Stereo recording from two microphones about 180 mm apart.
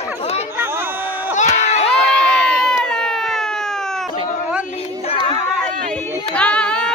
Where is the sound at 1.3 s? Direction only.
40° left (ahead or behind).